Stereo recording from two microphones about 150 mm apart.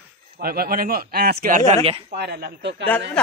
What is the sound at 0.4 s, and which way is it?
Speech, 80° right.